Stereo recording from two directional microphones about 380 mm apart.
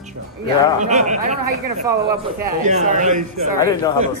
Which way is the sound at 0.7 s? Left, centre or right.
Centre.